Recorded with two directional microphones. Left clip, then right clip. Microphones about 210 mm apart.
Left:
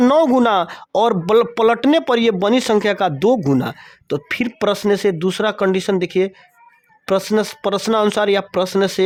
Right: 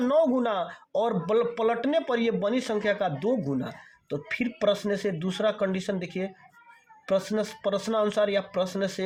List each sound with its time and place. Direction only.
0.0 s speech: 55° left (ahead or behind)